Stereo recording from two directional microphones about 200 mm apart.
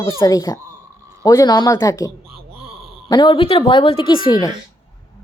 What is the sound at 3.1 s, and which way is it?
Speech, 20° left (ahead or behind).